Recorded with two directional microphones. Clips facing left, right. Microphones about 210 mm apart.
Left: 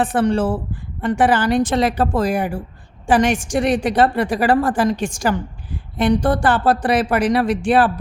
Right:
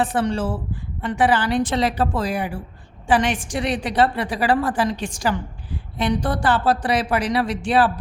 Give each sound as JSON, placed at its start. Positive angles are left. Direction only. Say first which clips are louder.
{"t": 0.0, "sound": "a woman's voice", "louder": "left 4 dB", "side_deg": 55}